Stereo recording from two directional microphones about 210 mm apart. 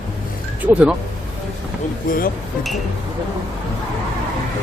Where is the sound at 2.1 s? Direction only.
40° left (ahead or behind).